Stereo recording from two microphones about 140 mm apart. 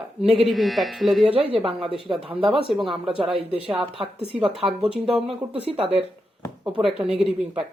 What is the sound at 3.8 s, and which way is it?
Speech, 40° right (ahead or behind).